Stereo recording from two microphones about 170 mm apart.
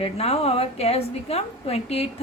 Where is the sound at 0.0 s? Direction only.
35° left (ahead or behind).